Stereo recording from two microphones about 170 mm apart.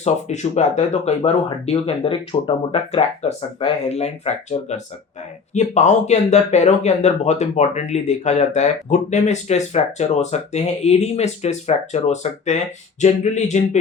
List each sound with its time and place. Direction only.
0.0 s speech: 40° left (ahead or behind)